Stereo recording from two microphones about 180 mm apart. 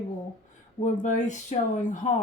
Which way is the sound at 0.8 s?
40° left (ahead or behind).